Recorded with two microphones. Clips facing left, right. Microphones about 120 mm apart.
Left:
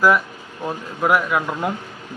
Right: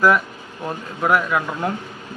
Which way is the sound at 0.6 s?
5° left (ahead or behind).